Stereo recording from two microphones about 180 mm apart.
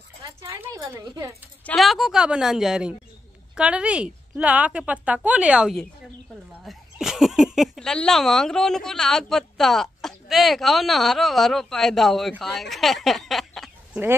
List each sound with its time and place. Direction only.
0.4 s a woman's voice: 15° right (ahead or behind)
1.7 s a woman's voice: centre (ahead or behind)